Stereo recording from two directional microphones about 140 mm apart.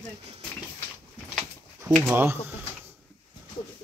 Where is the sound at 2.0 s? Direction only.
15° right (ahead or behind).